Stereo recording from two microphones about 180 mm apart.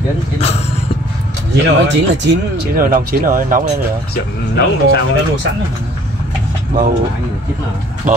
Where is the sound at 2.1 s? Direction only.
85° right.